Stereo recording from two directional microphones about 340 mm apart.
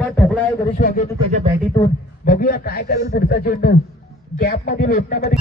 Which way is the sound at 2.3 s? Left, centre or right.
Left.